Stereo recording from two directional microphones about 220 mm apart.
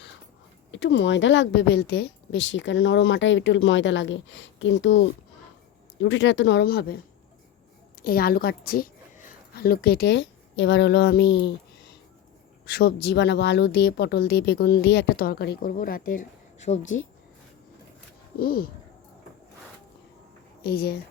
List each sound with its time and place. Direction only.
0.7 s a woman's voice: 55° left (ahead or behind)
6.0 s speech: 55° left (ahead or behind)
8.0 s a woman's voice: 40° left (ahead or behind)
12.6 s speech: 45° left (ahead or behind)
16.8 s a woman's voice: 60° left (ahead or behind)
18.3 s speech: 40° left (ahead or behind)
20.7 s speech: 45° left (ahead or behind)